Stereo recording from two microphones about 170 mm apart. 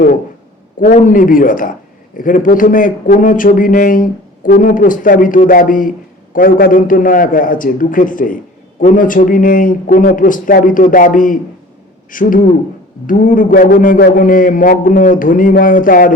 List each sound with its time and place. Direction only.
0.8 s a man's voice: 50° left (ahead or behind)